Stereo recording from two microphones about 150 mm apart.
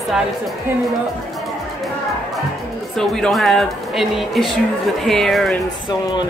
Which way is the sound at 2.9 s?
5° left (ahead or behind).